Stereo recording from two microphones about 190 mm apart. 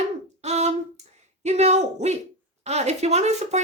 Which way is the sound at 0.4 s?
35° right (ahead or behind).